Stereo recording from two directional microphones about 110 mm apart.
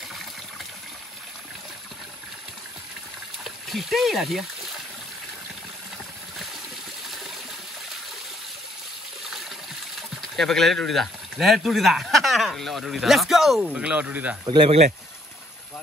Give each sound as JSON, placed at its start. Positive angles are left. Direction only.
{"t": 3.4, "sound": "a sound", "side_deg": 0}
{"t": 10.3, "sound": "speech", "side_deg": 0}
{"t": 14.4, "sound": "speech", "side_deg": -45}